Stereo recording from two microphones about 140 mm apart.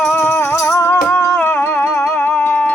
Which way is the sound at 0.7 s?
20° left (ahead or behind).